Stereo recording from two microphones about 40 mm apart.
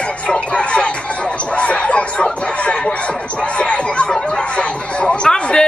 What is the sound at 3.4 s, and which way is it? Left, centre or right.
Chatter, left.